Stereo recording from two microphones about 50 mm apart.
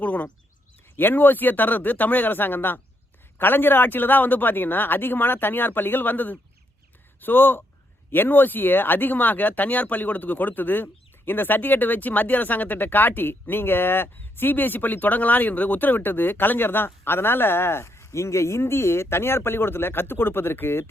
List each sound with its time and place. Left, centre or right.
0.0 s bird: left
0.9 s a man's voice: left